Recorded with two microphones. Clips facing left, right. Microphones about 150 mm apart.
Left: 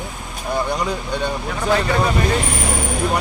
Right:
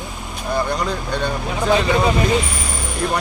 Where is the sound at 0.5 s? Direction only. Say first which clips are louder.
Even; 10° left (ahead or behind).